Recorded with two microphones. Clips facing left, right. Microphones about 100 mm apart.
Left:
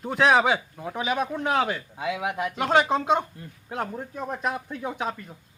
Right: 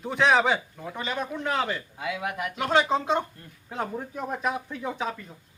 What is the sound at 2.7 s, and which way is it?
A man's voice, 5° left (ahead or behind).